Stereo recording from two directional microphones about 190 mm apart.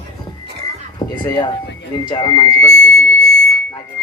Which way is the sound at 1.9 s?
25° left (ahead or behind).